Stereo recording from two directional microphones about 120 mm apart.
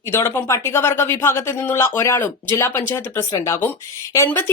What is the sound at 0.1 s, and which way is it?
A woman's voice, 20° left (ahead or behind).